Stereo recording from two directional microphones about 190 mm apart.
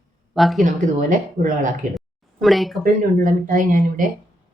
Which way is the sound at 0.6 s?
40° right (ahead or behind).